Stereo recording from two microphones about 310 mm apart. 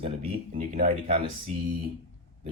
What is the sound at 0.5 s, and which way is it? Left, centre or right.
Speech, right.